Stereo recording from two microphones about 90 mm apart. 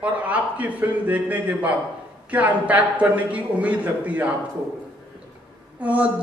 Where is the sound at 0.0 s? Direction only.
15° right (ahead or behind).